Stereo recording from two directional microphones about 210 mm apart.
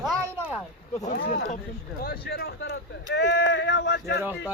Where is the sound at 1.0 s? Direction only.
40° left (ahead or behind).